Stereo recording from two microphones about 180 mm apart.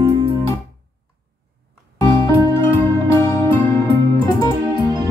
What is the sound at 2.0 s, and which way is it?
Music, 25° left (ahead or behind).